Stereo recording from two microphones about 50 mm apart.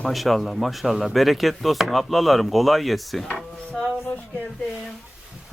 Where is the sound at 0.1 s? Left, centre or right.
Centre.